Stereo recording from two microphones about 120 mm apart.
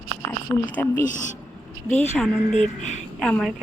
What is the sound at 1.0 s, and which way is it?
Speech, 90° left.